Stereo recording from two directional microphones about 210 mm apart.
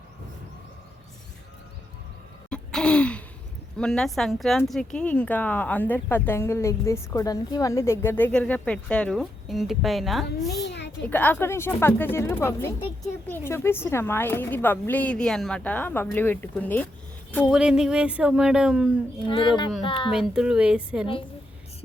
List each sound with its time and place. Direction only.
2.5 s gasp: 5° left (ahead or behind)
3.8 s speech: 5° left (ahead or behind)
10.6 s a sound: 55° left (ahead or behind)
11.1 s speech: 10° left (ahead or behind)
17.5 s speech: 5° right (ahead or behind)
19.3 s speech: 20° left (ahead or behind)
20.1 s speech: 5° right (ahead or behind)